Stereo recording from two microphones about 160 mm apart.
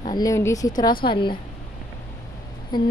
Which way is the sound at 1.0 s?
30° left (ahead or behind).